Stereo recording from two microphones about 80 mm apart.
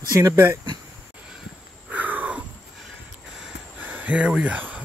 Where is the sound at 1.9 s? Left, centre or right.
Right.